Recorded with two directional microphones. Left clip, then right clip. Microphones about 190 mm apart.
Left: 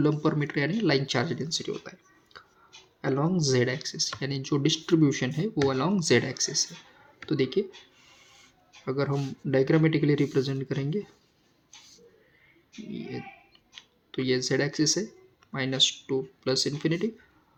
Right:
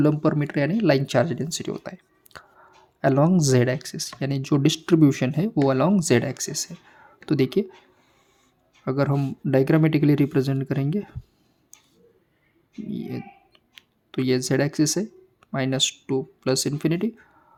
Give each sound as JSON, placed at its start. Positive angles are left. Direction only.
{"t": 0.0, "sound": "speech", "side_deg": -45}
{"t": 8.8, "sound": "speech", "side_deg": -50}
{"t": 12.9, "sound": "speech", "side_deg": -55}